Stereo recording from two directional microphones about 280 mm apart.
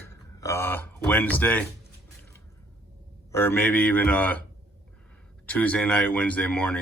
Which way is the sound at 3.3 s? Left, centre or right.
Centre.